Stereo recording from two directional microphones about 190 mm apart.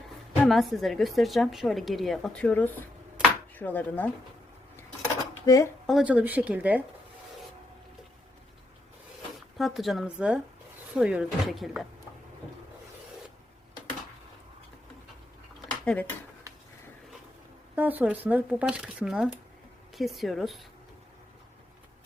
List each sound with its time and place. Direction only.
0.4 s a woman's voice: centre (ahead or behind)
3.2 s a sound: 10° left (ahead or behind)
5.5 s speech: 20° left (ahead or behind)
5.8 s speech: centre (ahead or behind)
9.6 s a woman's voice: centre (ahead or behind)
15.8 s speech: 10° left (ahead or behind)
17.7 s a woman's voice: 10° right (ahead or behind)